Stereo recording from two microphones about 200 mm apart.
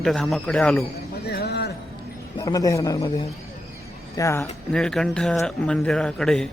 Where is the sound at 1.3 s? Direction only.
55° left (ahead or behind).